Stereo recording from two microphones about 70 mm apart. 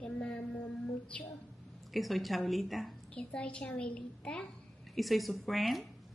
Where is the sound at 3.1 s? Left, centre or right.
Centre.